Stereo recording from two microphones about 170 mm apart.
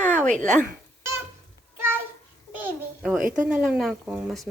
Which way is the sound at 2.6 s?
10° right (ahead or behind).